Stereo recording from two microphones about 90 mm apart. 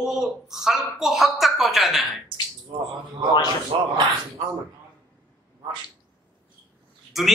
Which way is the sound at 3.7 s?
70° right (ahead or behind).